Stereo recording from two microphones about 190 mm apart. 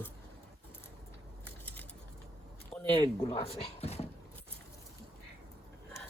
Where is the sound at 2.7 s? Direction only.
30° left (ahead or behind).